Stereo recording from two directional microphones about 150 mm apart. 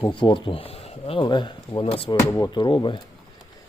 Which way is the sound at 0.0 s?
30° left (ahead or behind).